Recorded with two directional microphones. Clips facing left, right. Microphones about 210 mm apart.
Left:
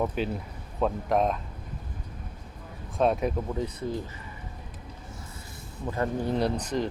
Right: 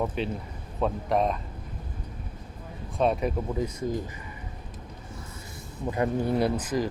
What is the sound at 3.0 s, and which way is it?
Speech, centre (ahead or behind).